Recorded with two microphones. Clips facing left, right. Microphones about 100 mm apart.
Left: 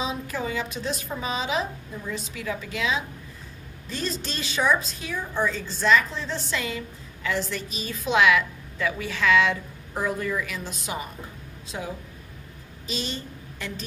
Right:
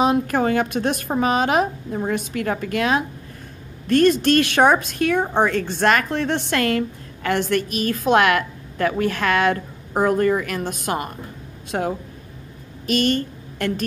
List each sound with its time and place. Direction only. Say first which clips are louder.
0.0 s a woman's voice: right 11 dB; 65° right (ahead or behind)